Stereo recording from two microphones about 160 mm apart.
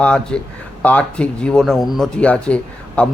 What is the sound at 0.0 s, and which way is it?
A man's voice, 5° left (ahead or behind).